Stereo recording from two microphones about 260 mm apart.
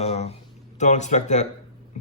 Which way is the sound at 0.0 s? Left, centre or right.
Left.